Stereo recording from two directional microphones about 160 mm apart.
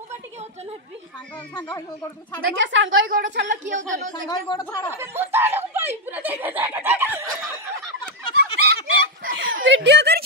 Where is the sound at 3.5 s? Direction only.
50° right (ahead or behind).